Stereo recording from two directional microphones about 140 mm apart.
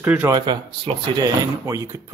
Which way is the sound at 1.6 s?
25° right (ahead or behind).